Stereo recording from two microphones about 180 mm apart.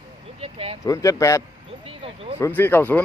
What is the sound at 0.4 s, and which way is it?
Speech, 35° right (ahead or behind).